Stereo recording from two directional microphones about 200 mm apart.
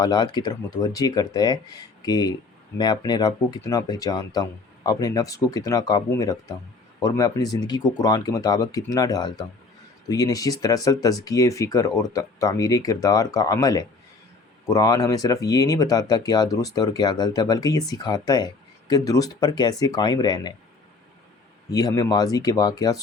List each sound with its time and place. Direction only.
0.0 s speech: 20° left (ahead or behind)
21.7 s speech: 20° left (ahead or behind)